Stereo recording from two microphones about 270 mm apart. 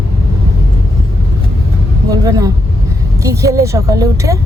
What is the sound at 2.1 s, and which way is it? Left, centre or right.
Speech, centre.